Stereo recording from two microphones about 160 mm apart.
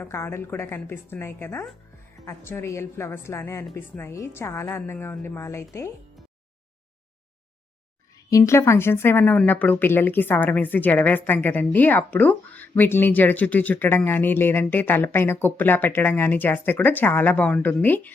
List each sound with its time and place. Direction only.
0.0 s a woman's voice: 15° left (ahead or behind)
8.3 s a woman's voice: 20° left (ahead or behind)